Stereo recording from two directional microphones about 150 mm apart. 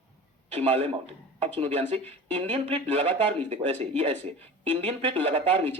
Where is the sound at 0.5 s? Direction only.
45° right (ahead or behind).